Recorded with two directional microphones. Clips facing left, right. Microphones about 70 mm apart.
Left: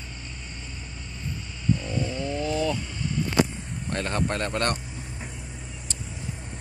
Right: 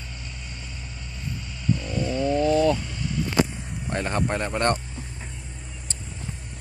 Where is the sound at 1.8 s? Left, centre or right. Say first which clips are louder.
Right 3 dB; centre.